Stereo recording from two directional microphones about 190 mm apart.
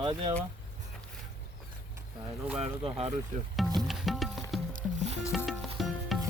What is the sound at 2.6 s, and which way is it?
Speech, 30° right (ahead or behind).